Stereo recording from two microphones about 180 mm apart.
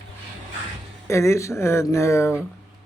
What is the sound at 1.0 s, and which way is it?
Speech, 15° left (ahead or behind).